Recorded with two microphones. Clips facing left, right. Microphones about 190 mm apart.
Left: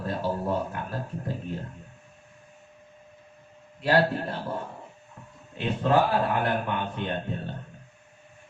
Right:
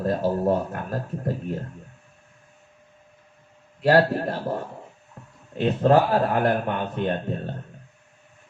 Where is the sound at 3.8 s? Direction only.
40° right (ahead or behind).